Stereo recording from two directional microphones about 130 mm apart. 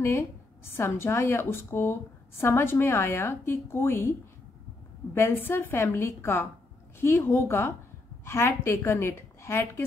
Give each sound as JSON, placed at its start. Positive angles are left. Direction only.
{"t": 0.7, "sound": "a woman's voice", "side_deg": 20}
{"t": 5.1, "sound": "a woman's voice", "side_deg": 20}